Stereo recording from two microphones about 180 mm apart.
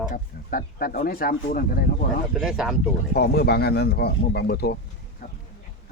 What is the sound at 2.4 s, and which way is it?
Speech, 5° right (ahead or behind).